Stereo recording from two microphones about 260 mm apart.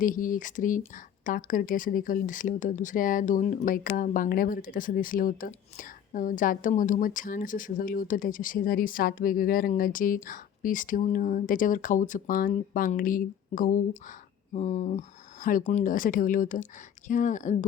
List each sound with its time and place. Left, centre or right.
0.0 s speech: left